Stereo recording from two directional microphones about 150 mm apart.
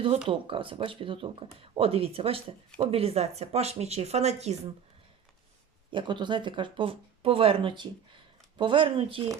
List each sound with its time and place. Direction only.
0.3 s speech: 35° right (ahead or behind)
5.9 s speech: 30° right (ahead or behind)